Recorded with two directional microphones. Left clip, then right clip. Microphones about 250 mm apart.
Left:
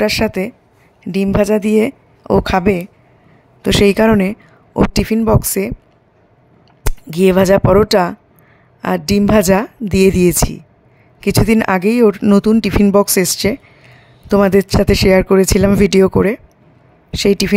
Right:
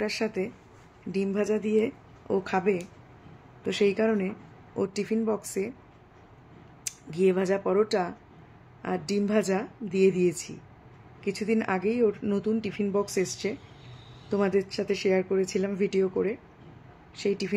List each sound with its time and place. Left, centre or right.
0.0 s speech: left
6.9 s speech: left